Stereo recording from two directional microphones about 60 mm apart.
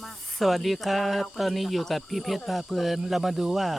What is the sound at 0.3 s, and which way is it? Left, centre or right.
Speech, centre.